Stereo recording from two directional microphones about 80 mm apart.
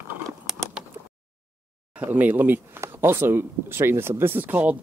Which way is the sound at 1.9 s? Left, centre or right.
Centre.